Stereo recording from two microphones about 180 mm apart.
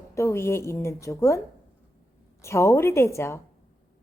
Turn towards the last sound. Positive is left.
turn(degrees=15)  # may be behind; listen again after turning